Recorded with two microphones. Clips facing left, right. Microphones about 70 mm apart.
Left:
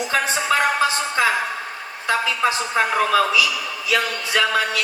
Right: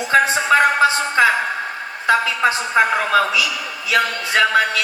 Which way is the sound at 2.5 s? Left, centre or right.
Right.